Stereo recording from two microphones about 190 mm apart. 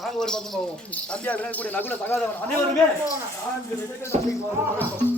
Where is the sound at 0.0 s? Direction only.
Centre (ahead or behind).